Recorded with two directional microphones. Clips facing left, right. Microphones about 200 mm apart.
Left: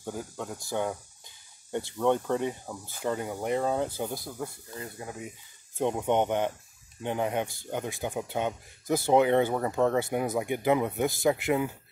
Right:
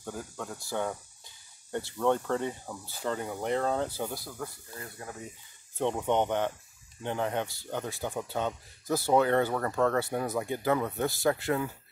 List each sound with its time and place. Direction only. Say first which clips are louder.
0.0 s speech: left 3 dB; 15° left (ahead or behind)